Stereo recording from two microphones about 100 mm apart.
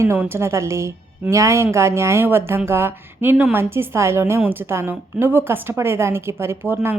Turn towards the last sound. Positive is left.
turn(degrees=-20)  # may be behind; listen again after turning